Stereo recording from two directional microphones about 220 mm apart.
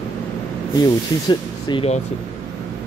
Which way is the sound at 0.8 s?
20° left (ahead or behind).